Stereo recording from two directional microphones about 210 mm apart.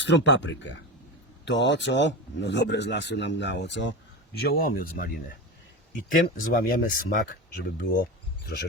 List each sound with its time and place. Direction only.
0.0 s speech: 60° left (ahead or behind)
4.4 s speech: 45° left (ahead or behind)